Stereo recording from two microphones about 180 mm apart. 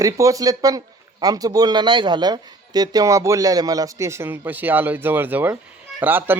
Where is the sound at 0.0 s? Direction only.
20° right (ahead or behind).